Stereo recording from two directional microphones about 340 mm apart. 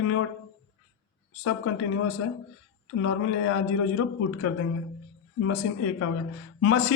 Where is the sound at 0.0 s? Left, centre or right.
Left.